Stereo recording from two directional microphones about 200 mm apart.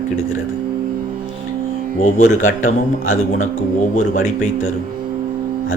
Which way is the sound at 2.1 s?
40° left (ahead or behind).